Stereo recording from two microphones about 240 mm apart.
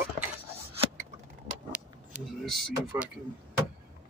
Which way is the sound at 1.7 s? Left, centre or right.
Centre.